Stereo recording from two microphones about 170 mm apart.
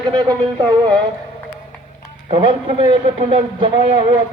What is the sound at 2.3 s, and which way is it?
Speech, 30° right (ahead or behind).